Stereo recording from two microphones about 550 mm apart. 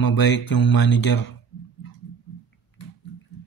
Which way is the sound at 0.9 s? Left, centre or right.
Left.